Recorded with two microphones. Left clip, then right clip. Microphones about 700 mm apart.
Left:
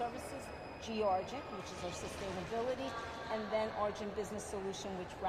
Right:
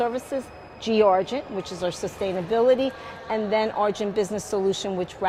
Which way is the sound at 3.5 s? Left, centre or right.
Right.